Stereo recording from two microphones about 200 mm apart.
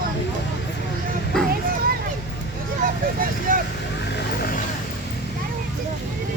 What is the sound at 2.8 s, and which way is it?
Vehicle, 45° right (ahead or behind).